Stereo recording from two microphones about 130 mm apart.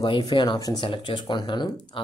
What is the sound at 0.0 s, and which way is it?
Speech, 35° left (ahead or behind).